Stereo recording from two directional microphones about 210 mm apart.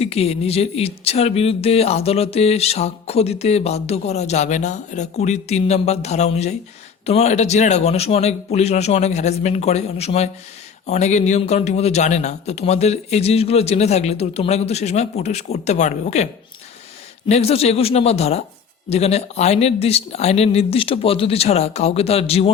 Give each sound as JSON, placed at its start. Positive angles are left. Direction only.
{"t": 0.0, "sound": "speech", "side_deg": 30}